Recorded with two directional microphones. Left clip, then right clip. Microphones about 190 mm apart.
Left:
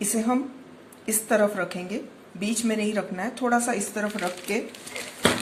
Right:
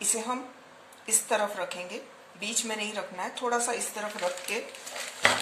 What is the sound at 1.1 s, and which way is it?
Speech, 15° left (ahead or behind).